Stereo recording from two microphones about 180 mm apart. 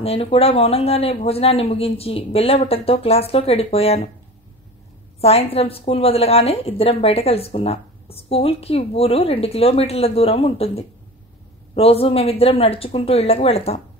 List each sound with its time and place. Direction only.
0.0 s a woman's voice: 35° left (ahead or behind)
5.2 s a woman's voice: 35° left (ahead or behind)